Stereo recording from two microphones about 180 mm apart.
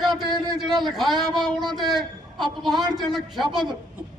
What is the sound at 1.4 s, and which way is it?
Speech, 25° right (ahead or behind).